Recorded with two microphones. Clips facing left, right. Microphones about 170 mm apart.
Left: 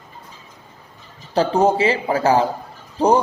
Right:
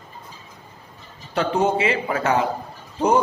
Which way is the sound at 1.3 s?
35° left (ahead or behind).